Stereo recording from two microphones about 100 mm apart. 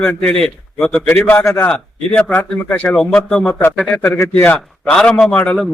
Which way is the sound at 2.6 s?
20° left (ahead or behind).